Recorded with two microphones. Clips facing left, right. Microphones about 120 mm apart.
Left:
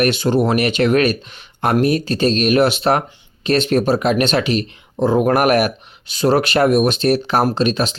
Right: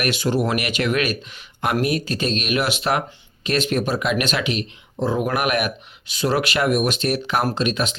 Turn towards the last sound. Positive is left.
turn(degrees=35)  # may be behind; listen again after turning